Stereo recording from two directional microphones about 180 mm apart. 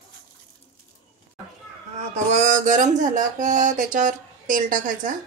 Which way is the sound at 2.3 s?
45° right (ahead or behind).